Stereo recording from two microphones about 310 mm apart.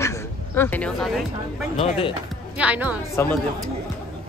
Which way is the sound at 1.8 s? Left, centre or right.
Centre.